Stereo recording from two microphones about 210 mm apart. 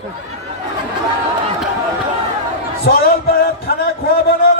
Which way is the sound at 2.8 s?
50° left (ahead or behind).